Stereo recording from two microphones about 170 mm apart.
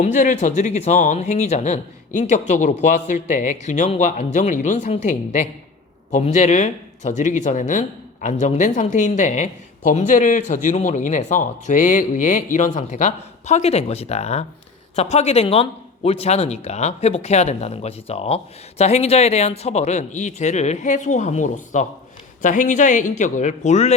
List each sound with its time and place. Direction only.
0.0 s speech: 45° left (ahead or behind)